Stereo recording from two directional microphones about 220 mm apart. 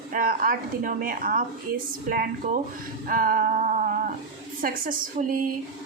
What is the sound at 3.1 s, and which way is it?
Music, 40° right (ahead or behind).